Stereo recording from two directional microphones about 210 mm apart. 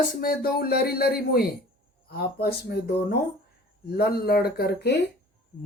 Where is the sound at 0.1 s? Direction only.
45° left (ahead or behind).